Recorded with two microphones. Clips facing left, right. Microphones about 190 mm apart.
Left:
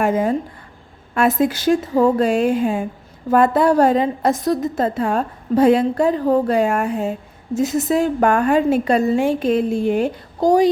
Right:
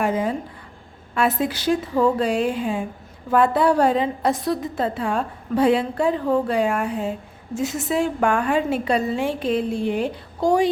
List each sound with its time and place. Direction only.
0.0 s a woman's voice: 45° left (ahead or behind)